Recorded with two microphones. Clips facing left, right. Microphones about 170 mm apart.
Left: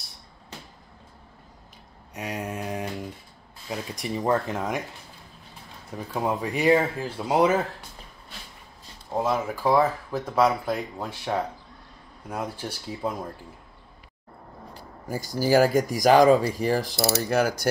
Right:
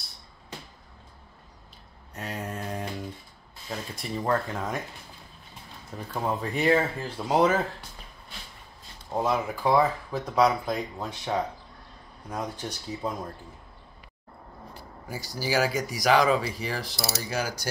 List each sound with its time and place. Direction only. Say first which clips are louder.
2.1 s mantra: left 3 dB; 15° left (ahead or behind)
3.7 s speech: left 3 dB; 15° left (ahead or behind)
5.9 s speech: left 3 dB; 10° left (ahead or behind)
9.1 s speech: left 1 dB; 5° left (ahead or behind)
15.0 s speech: left 7 dB; 45° left (ahead or behind)